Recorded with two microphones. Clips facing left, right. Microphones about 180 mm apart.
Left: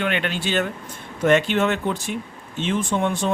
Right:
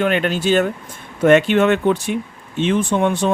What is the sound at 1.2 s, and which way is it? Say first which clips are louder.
Speech: right 5 dB; 60° right (ahead or behind).